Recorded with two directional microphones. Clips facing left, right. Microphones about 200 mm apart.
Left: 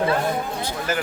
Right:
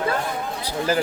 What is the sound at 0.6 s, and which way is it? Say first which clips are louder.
Speech: right 3 dB; 35° right (ahead or behind).